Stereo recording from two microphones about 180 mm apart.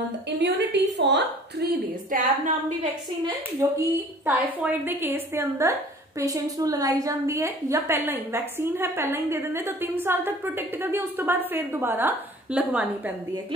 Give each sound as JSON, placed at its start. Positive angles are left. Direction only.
{"t": 0.3, "sound": "a woman's voice", "side_deg": -70}
{"t": 3.6, "sound": "a woman's voice", "side_deg": -15}